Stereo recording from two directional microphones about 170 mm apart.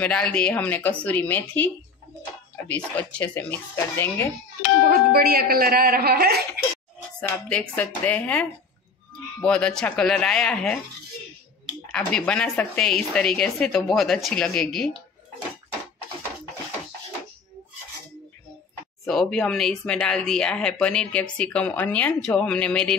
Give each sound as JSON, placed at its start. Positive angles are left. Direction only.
{"t": 0.0, "sound": "speech", "side_deg": 5}
{"t": 4.8, "sound": "speech", "side_deg": -60}
{"t": 7.2, "sound": "speech", "side_deg": 5}
{"t": 11.9, "sound": "speech", "side_deg": 5}
{"t": 19.0, "sound": "speech", "side_deg": 5}